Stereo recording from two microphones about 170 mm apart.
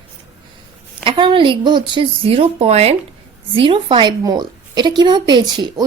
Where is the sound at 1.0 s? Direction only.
30° right (ahead or behind).